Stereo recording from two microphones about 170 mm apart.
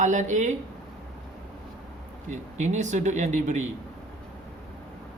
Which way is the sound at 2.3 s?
45° right (ahead or behind).